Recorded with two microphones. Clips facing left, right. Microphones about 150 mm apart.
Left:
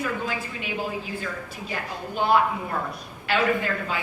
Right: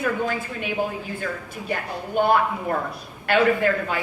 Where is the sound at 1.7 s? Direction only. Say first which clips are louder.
Right 6 dB; 55° right (ahead or behind).